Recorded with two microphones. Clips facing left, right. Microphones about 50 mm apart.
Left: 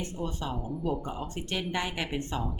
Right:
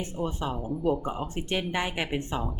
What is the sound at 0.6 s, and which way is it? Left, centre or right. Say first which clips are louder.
Speech: right 7 dB; centre.